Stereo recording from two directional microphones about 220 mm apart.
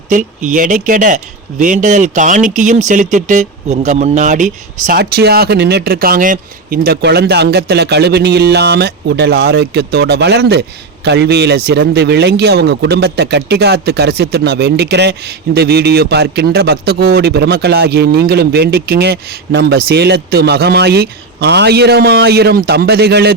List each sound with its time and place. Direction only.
0.1 s speech: 35° right (ahead or behind)